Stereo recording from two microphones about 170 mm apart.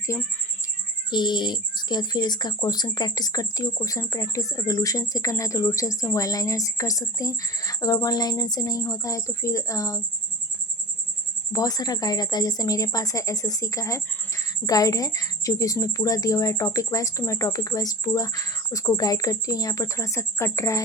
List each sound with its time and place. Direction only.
0.1 s a woman's voice: 15° left (ahead or behind)
11.5 s a woman's voice: 20° left (ahead or behind)